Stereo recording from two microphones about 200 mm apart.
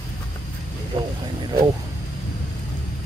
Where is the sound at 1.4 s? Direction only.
25° right (ahead or behind).